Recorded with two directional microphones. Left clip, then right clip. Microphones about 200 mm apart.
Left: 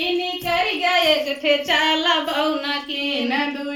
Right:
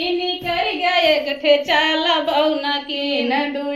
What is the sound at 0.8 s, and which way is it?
Child singing, 30° left (ahead or behind).